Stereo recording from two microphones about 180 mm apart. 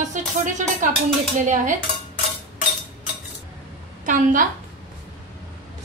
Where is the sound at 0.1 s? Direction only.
45° right (ahead or behind).